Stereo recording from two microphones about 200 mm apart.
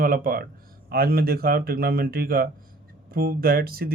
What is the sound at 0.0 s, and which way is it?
Speech, 45° right (ahead or behind).